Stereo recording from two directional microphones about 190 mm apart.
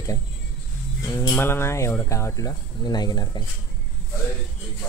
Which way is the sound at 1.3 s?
10° left (ahead or behind).